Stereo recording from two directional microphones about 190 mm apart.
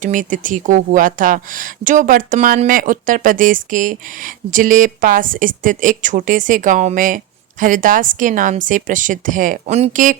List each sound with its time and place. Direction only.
0.0 s speech: 45° right (ahead or behind)